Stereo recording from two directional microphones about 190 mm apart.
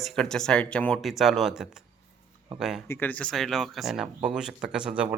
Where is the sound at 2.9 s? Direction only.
10° left (ahead or behind).